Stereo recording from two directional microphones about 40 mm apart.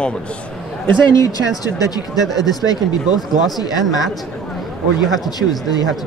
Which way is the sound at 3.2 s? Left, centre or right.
Centre.